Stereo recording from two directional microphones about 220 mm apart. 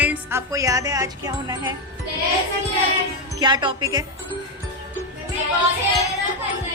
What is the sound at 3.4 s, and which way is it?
Speech, 20° right (ahead or behind).